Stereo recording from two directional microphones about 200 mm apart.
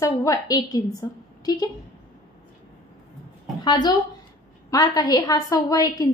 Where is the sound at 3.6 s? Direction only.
20° left (ahead or behind).